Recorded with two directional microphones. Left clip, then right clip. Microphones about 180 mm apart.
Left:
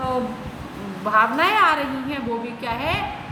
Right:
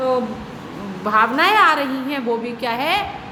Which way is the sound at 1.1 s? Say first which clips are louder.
Right 3 dB; 35° right (ahead or behind).